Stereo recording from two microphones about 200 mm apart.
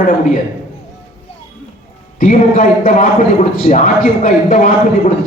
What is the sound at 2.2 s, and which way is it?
A man's voice, 45° left (ahead or behind).